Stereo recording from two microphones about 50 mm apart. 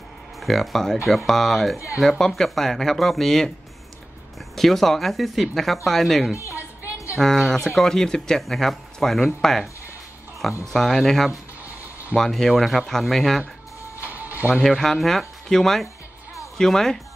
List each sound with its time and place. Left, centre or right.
0.4 s speech: centre
4.6 s speech: centre
6.5 s music: right
7.2 s speech: centre
10.7 s speech: centre
14.0 s a sound: right
14.6 s speech: centre